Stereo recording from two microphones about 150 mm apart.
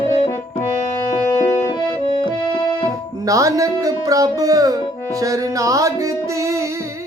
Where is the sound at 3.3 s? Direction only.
20° right (ahead or behind).